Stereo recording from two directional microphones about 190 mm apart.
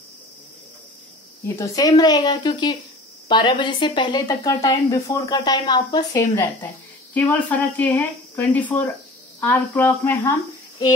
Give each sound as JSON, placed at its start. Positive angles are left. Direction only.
{"t": 1.6, "sound": "speech", "side_deg": 20}
{"t": 7.2, "sound": "speech", "side_deg": 10}